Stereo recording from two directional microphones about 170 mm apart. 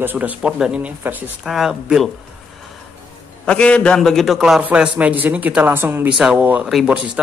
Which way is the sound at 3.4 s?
5° left (ahead or behind).